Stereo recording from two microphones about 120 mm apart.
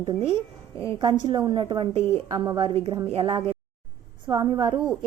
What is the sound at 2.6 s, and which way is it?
Speech, 50° right (ahead or behind).